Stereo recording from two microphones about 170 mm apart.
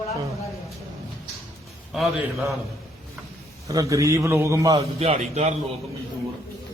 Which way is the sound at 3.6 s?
20° right (ahead or behind).